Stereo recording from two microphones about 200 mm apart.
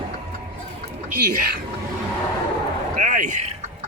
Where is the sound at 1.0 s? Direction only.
45° right (ahead or behind).